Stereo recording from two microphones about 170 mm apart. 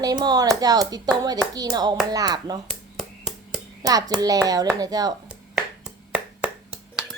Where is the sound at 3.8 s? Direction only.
20° right (ahead or behind).